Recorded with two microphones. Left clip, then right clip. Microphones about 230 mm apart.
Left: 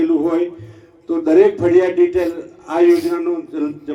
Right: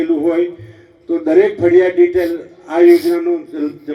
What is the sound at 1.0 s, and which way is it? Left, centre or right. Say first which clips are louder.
A man's voice: even; right.